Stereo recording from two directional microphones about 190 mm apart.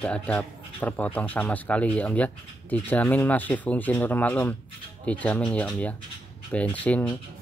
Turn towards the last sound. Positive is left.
turn(degrees=10)  # may be behind; listen again after turning